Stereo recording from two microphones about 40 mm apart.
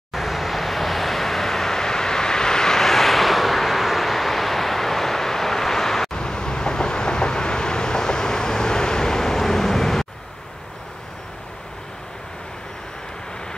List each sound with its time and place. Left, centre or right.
0.1 s vehicle: centre
6.1 s vehicle: centre